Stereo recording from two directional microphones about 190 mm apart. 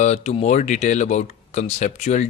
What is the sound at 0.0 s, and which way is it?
Speech, 35° left (ahead or behind).